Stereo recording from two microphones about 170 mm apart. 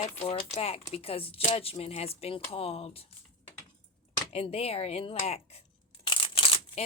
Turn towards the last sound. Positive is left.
turn(degrees=35)  # may be behind; listen again after turning